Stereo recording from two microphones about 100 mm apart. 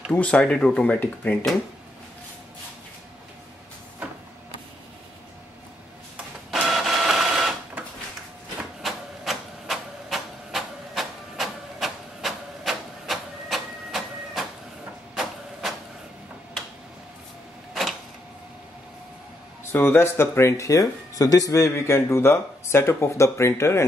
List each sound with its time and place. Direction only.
0.1 s speech: 10° left (ahead or behind)
6.5 s printer: centre (ahead or behind)
8.8 s a sound: centre (ahead or behind)
19.7 s speech: 20° left (ahead or behind)